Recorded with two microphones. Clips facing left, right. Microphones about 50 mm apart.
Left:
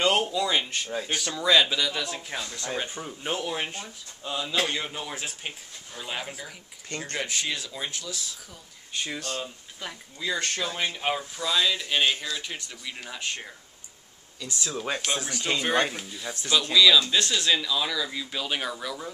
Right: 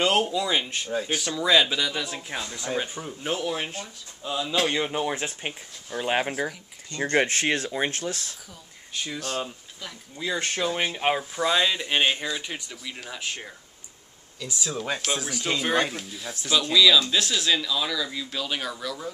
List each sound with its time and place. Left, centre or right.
0.0 s speech: centre
4.7 s speech: right
6.0 s speech: right
8.9 s speech: centre
10.1 s speech: centre
11.3 s speech: right
12.8 s speech: centre
14.8 s speech: centre